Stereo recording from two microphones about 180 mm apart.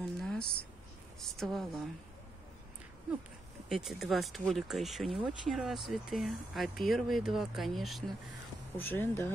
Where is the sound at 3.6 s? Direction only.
Centre (ahead or behind).